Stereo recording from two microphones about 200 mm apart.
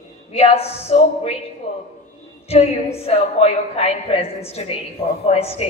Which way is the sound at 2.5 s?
30° left (ahead or behind).